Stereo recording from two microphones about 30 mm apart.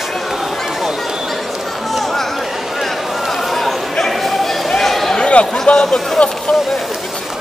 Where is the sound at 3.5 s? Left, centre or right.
Centre.